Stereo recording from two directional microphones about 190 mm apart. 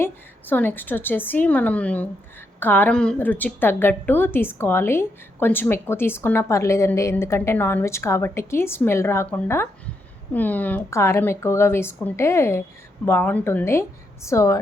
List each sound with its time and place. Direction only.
0.0 s a woman's voice: 10° left (ahead or behind)